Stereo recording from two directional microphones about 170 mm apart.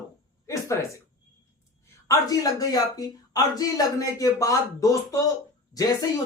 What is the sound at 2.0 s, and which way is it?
Speech, 20° left (ahead or behind).